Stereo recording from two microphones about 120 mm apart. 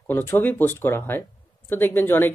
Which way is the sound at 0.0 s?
15° left (ahead or behind).